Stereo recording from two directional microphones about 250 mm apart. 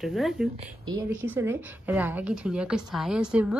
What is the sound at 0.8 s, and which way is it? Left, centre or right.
Speech, centre.